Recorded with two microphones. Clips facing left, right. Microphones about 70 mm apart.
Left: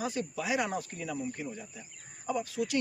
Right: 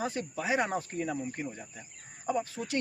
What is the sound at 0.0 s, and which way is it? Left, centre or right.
Speech, right.